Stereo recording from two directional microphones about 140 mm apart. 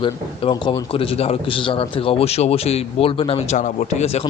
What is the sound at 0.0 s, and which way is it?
A man's voice, 35° left (ahead or behind).